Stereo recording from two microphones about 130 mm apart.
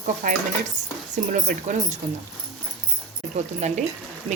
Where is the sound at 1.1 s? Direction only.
75° right (ahead or behind).